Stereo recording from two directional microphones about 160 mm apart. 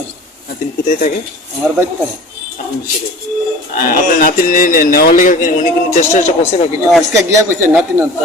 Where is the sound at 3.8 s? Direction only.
60° left (ahead or behind).